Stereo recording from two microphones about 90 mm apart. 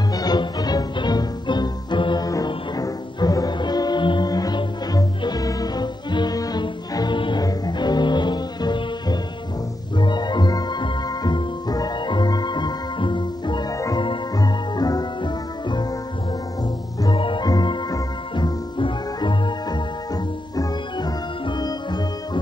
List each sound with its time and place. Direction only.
0.1 s music: 50° left (ahead or behind)
2.2 s music: 40° left (ahead or behind); by 4.3 s 60° left (ahead or behind)
4.3 s music: 50° left (ahead or behind)
7.4 s music: 50° left (ahead or behind)
17.1 s music: 65° left (ahead or behind)
17.5 s music: 50° left (ahead or behind)
20.5 s music: 50° left (ahead or behind)